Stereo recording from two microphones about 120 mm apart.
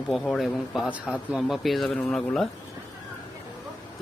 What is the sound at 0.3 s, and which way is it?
A man's voice, centre (ahead or behind).